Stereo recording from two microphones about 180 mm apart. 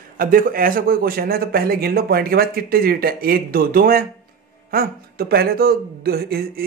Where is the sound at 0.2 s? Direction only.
50° right (ahead or behind).